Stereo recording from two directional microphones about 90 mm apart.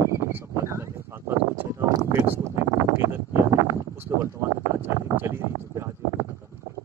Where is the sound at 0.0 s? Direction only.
30° right (ahead or behind).